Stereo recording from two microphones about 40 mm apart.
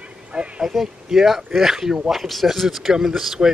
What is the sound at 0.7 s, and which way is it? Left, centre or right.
Speech, centre.